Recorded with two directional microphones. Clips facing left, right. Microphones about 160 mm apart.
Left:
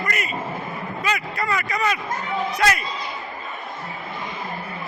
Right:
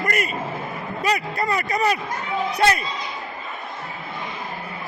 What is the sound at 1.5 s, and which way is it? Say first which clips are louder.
Speech: right 2 dB; 35° right (ahead or behind).